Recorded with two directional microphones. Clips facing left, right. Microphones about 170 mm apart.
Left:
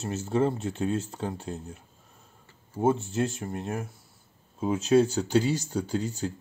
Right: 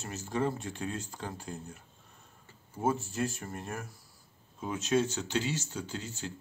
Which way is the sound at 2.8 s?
25° left (ahead or behind).